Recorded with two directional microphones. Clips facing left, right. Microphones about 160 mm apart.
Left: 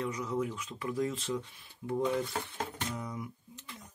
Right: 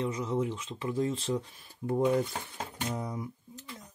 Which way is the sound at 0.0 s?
25° right (ahead or behind).